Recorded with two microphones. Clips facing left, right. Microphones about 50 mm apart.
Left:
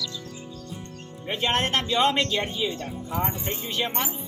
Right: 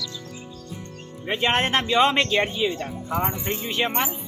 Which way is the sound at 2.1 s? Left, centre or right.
Right.